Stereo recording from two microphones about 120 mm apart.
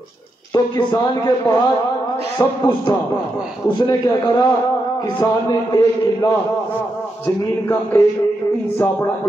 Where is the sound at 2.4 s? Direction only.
40° left (ahead or behind).